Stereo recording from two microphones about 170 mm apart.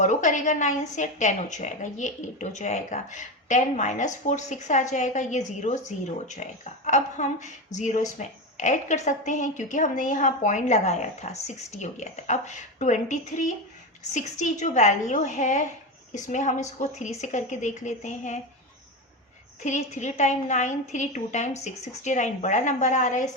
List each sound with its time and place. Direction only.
0.0 s speech: 45° left (ahead or behind)
19.6 s speech: 45° left (ahead or behind)